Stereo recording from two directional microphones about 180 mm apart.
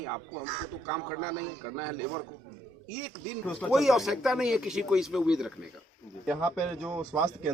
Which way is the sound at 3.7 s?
Centre (ahead or behind).